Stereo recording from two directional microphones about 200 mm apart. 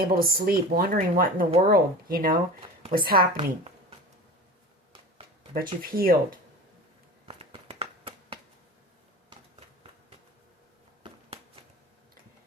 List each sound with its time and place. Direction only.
0.0 s speech: 50° right (ahead or behind)
3.3 s a woman's voice: 30° right (ahead or behind)
5.8 s speech: 45° right (ahead or behind)
7.3 s a sound: 30° right (ahead or behind)